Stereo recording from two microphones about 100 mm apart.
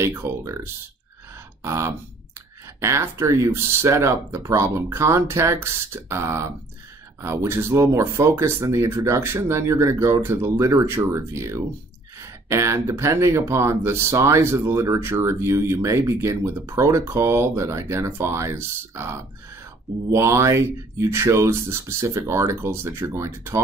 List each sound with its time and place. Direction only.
0.0 s speech: 25° right (ahead or behind)
1.6 s speech: 25° right (ahead or behind)